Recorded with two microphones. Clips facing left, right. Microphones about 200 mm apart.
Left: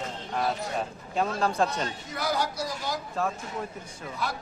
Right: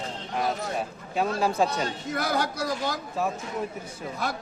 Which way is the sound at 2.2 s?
55° right (ahead or behind).